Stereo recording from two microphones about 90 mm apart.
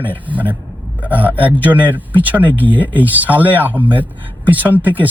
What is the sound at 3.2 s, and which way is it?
Speech, 20° right (ahead or behind).